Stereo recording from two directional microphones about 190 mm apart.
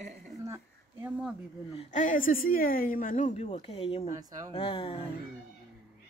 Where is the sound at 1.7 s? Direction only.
35° left (ahead or behind).